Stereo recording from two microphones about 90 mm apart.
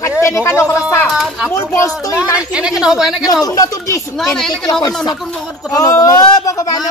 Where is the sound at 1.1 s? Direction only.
Centre (ahead or behind).